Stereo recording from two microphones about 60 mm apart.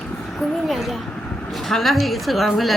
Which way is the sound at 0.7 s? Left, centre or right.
Centre.